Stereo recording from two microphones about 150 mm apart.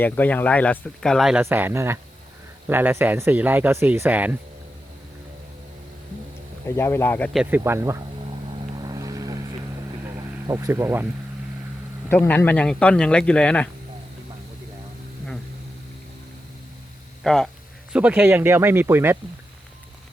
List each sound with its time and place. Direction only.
0.0 s speech: 10° left (ahead or behind); by 1.5 s 5° right (ahead or behind)
1.5 s speech: 15° right (ahead or behind)
6.7 s speech: 15° left (ahead or behind)
7.5 s speech: 15° right (ahead or behind)
8.8 s vehicle: 25° right (ahead or behind)
10.2 s speech: 20° right (ahead or behind)
12.1 s speech: 15° left (ahead or behind)
17.2 s speech: centre (ahead or behind)
17.9 s speech: 10° right (ahead or behind)